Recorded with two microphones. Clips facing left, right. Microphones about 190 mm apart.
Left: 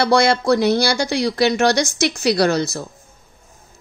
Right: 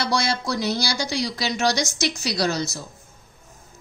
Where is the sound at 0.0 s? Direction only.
60° left (ahead or behind).